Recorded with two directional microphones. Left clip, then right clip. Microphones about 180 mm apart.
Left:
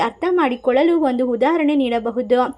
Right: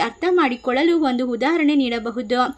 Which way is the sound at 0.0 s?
5° right (ahead or behind).